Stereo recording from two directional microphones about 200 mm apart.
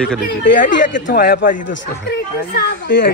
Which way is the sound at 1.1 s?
45° left (ahead or behind).